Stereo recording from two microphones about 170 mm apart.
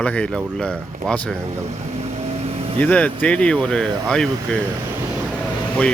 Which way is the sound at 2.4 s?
35° right (ahead or behind).